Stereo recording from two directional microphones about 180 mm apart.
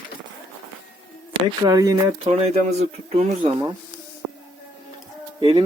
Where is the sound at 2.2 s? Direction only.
35° right (ahead or behind).